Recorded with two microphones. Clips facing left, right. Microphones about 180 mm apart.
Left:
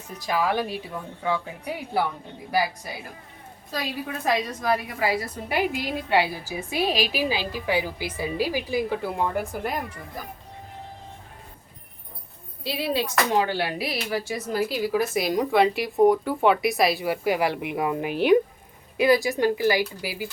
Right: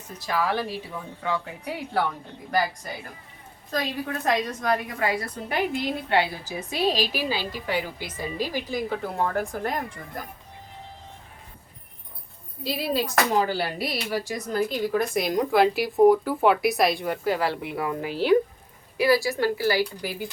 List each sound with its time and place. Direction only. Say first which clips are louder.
0.2 s a woman's voice: left 2 dB; 15° left (ahead or behind)
4.3 s a woman's voice: left 1 dB; 5° left (ahead or behind)
12.6 s a woman's voice: even; centre (ahead or behind)